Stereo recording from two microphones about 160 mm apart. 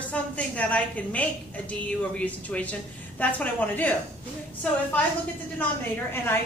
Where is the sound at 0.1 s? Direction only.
10° left (ahead or behind).